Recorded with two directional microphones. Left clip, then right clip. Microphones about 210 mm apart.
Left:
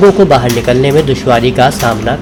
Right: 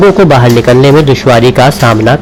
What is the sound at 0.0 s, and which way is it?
A man's voice, 35° right (ahead or behind).